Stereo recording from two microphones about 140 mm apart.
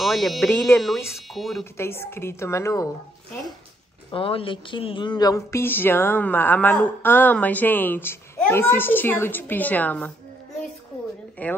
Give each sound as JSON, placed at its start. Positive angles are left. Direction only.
{"t": 0.0, "sound": "speech", "side_deg": 0}
{"t": 0.5, "sound": "a woman's voice", "side_deg": 10}
{"t": 1.3, "sound": "speech", "side_deg": 0}
{"t": 1.8, "sound": "a woman's voice", "side_deg": 20}
{"t": 4.1, "sound": "a woman's voice", "side_deg": 40}
{"t": 11.4, "sound": "speech", "side_deg": 10}